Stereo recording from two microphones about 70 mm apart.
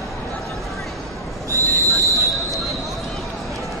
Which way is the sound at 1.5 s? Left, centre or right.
Right.